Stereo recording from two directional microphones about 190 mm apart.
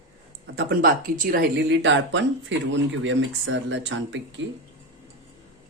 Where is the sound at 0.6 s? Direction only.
50° right (ahead or behind); by 4.4 s 75° right (ahead or behind).